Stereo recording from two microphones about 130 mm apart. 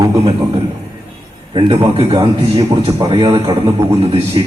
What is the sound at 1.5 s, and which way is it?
A man's voice, 45° right (ahead or behind).